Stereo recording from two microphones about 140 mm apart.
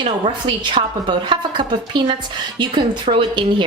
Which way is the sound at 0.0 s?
35° right (ahead or behind).